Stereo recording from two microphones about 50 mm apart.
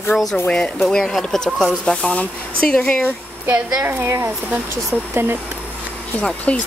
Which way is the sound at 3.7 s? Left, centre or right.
Right.